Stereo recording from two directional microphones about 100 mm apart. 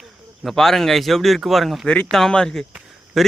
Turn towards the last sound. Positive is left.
turn(degrees=0)  # may be behind; listen again after turning